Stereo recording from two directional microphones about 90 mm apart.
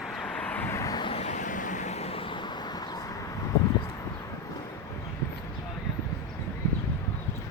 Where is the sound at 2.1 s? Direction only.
80° left; by 2.8 s 55° left (ahead or behind).